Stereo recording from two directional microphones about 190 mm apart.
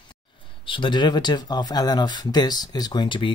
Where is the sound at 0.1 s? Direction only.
25° left (ahead or behind).